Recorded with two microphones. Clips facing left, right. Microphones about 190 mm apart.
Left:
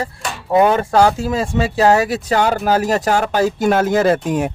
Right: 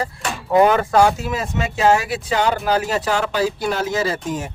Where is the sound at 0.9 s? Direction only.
30° left (ahead or behind).